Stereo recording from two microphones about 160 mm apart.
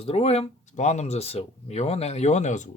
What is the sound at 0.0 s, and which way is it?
Speech, 40° left (ahead or behind).